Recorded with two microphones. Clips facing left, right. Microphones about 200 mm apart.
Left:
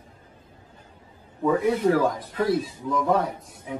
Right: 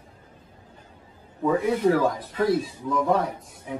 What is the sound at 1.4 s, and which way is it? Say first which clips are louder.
Speech: even; 10° right (ahead or behind).